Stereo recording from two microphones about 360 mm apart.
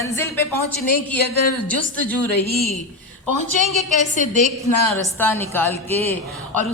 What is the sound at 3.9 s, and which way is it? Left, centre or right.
Speech, left.